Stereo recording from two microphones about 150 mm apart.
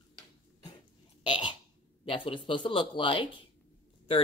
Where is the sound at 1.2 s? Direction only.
30° left (ahead or behind).